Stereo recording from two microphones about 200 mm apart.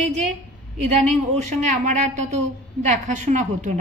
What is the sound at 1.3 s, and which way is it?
A woman's voice, 35° right (ahead or behind).